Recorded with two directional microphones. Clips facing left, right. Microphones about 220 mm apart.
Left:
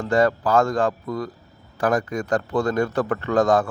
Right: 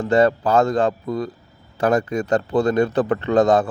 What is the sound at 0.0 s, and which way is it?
Speech, 25° right (ahead or behind).